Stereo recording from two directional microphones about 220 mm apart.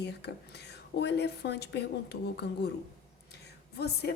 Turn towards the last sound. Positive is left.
turn(degrees=45)  # may be behind; listen again after turning